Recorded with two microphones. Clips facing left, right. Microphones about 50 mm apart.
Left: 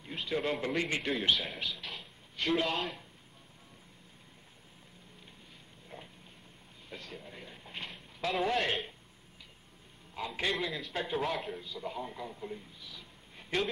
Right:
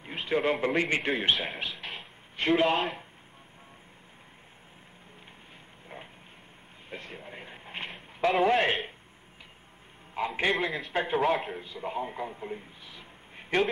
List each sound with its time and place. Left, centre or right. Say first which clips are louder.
0.0 s a man's voice: right 6 dB; right
1.8 s a sound: right 4 dB; right
2.6 s a man's voice: right 8 dB; right
6.9 s a sound: right 4 dB; right
8.4 s a man's voice: right 6 dB; right
10.1 s a man's voice: right 6 dB; right